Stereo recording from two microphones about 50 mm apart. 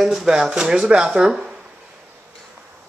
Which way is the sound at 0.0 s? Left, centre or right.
Centre.